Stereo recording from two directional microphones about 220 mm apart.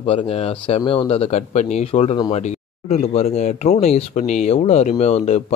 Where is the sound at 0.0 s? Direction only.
25° left (ahead or behind).